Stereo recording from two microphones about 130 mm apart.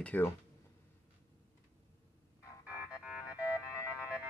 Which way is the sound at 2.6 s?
10° right (ahead or behind).